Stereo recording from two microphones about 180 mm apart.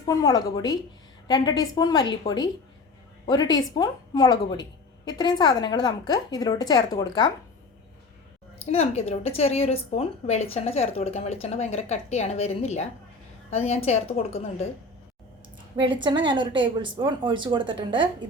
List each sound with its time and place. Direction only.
0.0 s a woman's voice: 20° left (ahead or behind)
8.7 s a woman's voice: 35° left (ahead or behind)
15.8 s a woman's voice: 25° right (ahead or behind)